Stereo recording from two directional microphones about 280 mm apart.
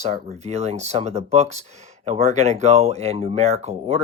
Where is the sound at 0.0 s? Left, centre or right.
Right.